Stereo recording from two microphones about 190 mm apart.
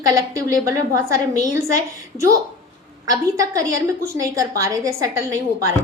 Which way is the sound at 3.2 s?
15° right (ahead or behind).